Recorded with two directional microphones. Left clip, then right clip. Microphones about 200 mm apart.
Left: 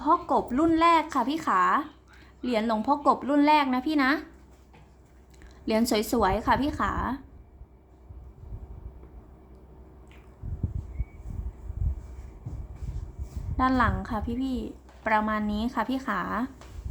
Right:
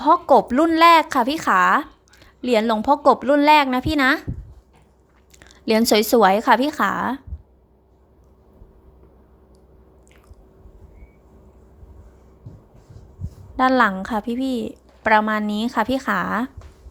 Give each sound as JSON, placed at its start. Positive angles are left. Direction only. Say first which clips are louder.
{"t": 0.0, "sound": "a woman's voice", "louder": "right 9 dB", "side_deg": -40}
{"t": 5.4, "sound": "a woman's voice", "louder": "right 7 dB", "side_deg": -35}
{"t": 13.6, "sound": "a woman's voice", "louder": "right 8 dB", "side_deg": -35}